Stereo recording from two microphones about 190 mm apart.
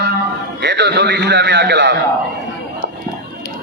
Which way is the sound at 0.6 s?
65° right (ahead or behind).